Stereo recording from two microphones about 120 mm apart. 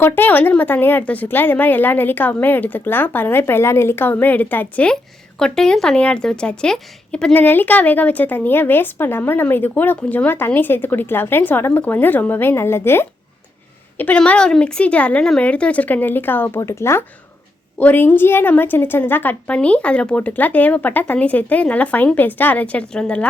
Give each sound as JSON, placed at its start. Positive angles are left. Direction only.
{"t": 0.0, "sound": "speech", "side_deg": 15}